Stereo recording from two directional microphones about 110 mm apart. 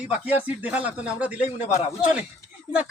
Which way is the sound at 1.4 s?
90° left.